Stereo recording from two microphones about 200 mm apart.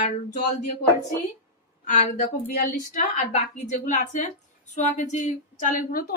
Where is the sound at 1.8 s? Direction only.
40° left (ahead or behind).